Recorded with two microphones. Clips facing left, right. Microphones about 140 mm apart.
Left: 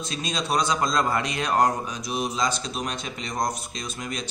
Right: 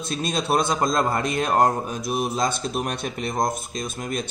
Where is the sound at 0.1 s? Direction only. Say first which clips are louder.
Right 4 dB; 55° right (ahead or behind).